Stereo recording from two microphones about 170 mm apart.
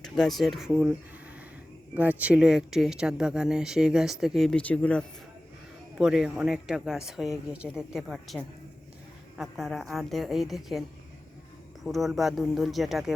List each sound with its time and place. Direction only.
0.0 s speech: centre (ahead or behind)
2.0 s speech: 10° right (ahead or behind); by 5.0 s 5° left (ahead or behind)
6.0 s speech: 5° right (ahead or behind)